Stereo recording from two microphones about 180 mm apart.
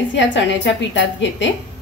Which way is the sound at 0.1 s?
90° left.